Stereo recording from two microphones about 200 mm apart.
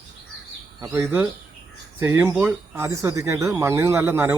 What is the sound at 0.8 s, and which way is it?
Speech, 10° right (ahead or behind).